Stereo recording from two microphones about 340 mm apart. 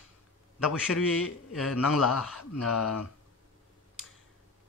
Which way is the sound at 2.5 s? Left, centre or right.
Left.